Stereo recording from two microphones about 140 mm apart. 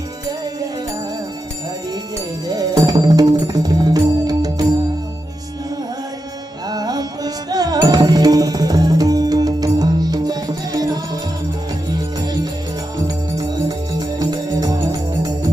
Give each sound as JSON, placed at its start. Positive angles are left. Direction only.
{"t": 2.5, "sound": "music", "side_deg": -30}
{"t": 6.7, "sound": "music", "side_deg": -30}
{"t": 14.2, "sound": "music", "side_deg": -25}